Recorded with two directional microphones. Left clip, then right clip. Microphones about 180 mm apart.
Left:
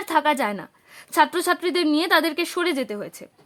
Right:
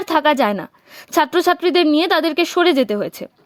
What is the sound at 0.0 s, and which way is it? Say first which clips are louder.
A woman's voice: right 5 dB; 30° right (ahead or behind).